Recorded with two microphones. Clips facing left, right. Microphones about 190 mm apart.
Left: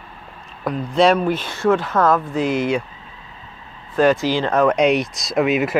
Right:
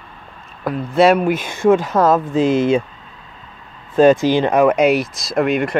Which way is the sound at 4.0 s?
20° right (ahead or behind).